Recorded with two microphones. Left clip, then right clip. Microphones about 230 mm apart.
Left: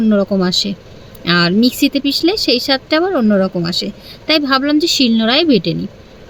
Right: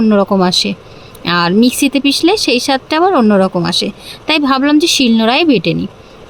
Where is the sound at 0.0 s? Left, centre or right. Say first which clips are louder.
Right 4 dB; right.